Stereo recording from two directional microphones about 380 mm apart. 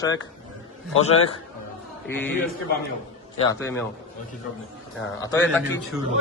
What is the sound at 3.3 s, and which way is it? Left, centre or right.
Speech, centre.